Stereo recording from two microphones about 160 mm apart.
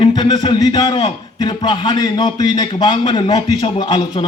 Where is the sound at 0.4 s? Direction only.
30° left (ahead or behind).